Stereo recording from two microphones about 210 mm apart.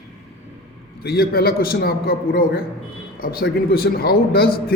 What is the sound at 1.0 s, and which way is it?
A man's voice, 45° left (ahead or behind).